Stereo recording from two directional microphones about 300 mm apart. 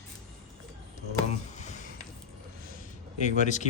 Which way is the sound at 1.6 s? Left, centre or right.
Left.